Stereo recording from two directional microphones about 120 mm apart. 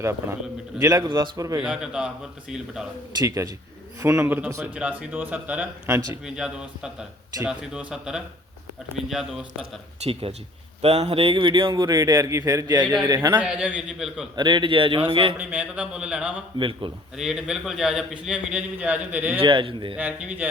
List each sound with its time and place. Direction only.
0.0 s a man's voice: 20° right (ahead or behind)
1.6 s speech: 5° right (ahead or behind)
3.2 s a man's voice: 30° right (ahead or behind); by 5.6 s 15° right (ahead or behind)
5.8 s a man's voice: 30° right (ahead or behind)
6.2 s a man's voice: 5° right (ahead or behind)
9.6 s a man's voice: 50° right (ahead or behind)
11.7 s a man's voice: 30° right (ahead or behind)
13.4 s speech: 10° right (ahead or behind)
14.3 s a man's voice: 40° right (ahead or behind)
15.4 s speech: 10° right (ahead or behind)
16.6 s a man's voice: 45° right (ahead or behind)
17.2 s a man's voice: 5° right (ahead or behind)
19.4 s a man's voice: 45° right (ahead or behind)
20.0 s speech: 10° right (ahead or behind)